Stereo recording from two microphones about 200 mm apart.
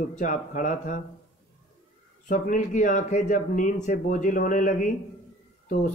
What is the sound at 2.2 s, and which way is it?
Speech, 40° left (ahead or behind).